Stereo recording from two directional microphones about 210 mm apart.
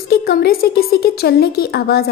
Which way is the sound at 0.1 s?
45° left (ahead or behind).